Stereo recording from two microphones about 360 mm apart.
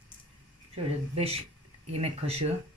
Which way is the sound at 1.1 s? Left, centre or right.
Centre.